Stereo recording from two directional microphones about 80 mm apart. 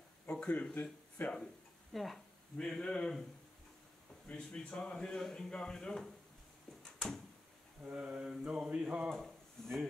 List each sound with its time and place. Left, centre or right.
0.3 s speech: centre
1.3 s speech: centre
4.3 s speech: centre
6.8 s a sound: centre
7.8 s mantra: centre
9.1 s speech: centre